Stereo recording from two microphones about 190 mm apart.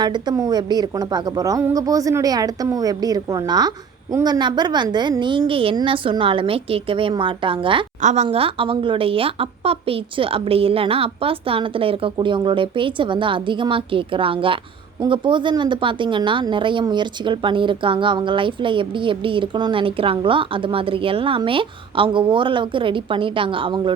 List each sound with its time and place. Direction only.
0.0 s speech: 20° right (ahead or behind)